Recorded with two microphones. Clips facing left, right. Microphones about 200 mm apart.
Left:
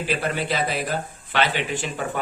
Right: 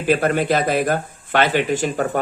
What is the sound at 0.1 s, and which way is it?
Speech, 50° right (ahead or behind).